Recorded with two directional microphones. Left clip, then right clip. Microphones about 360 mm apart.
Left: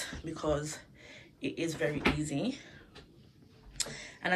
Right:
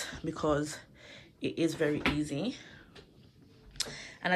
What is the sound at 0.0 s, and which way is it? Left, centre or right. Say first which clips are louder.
Speech: right 3 dB; centre.